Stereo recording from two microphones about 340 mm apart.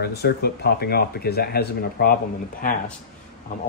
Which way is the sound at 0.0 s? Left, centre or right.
Left.